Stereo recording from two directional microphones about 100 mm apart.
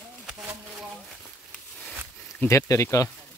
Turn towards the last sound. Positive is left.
turn(degrees=30)  # may be behind; listen again after turning